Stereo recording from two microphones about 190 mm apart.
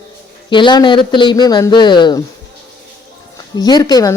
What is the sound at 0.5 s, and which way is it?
Speech, 25° left (ahead or behind).